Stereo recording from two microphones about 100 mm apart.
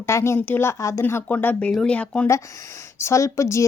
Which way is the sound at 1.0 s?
20° left (ahead or behind).